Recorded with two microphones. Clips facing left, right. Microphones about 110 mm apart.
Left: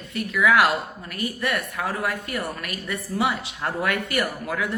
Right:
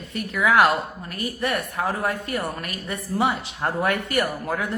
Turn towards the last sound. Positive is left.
turn(degrees=-40)  # may be behind; listen again after turning